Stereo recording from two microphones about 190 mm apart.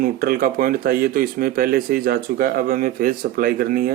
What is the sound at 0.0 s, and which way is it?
Speech, 50° right (ahead or behind).